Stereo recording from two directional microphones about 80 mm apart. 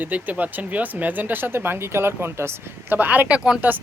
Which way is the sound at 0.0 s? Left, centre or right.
Right.